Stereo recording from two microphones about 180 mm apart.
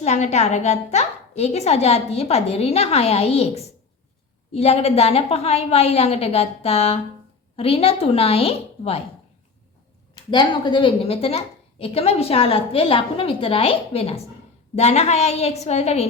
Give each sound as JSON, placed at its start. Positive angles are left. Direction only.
{"t": 0.0, "sound": "a woman's voice", "side_deg": 40}
{"t": 10.3, "sound": "a woman's voice", "side_deg": 25}